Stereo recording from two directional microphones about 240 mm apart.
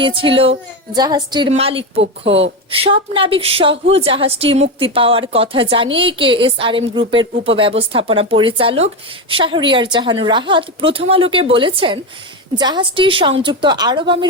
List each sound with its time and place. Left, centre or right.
0.0 s a woman's voice: right